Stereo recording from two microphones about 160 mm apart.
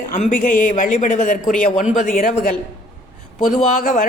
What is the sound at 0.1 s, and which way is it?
A woman's voice, 55° left (ahead or behind).